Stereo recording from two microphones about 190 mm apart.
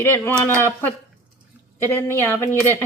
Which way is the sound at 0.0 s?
10° left (ahead or behind).